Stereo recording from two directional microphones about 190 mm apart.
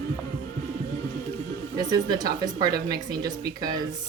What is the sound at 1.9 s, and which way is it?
A woman's voice, 20° right (ahead or behind).